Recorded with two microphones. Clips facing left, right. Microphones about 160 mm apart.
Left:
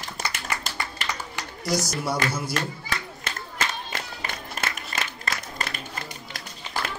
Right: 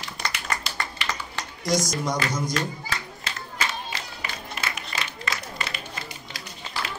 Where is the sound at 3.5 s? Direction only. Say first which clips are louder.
Even; 50° left (ahead or behind).